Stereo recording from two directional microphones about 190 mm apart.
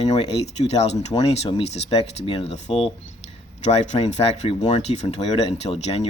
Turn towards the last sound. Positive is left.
turn(degrees=35)  # may be behind; listen again after turning